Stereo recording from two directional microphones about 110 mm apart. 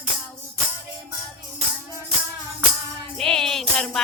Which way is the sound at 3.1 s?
5° left (ahead or behind).